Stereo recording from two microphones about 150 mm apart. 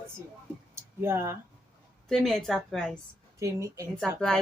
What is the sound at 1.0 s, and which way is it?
Speech, 20° right (ahead or behind).